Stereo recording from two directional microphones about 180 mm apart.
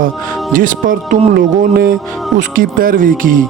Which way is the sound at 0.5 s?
50° right (ahead or behind).